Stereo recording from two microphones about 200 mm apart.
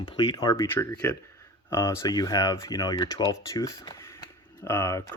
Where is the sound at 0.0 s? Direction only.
20° left (ahead or behind).